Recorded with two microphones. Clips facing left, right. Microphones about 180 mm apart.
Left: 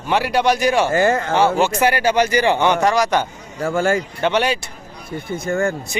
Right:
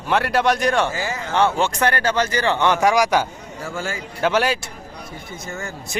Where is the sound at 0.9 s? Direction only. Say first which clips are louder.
Left 10 dB; 55° left (ahead or behind).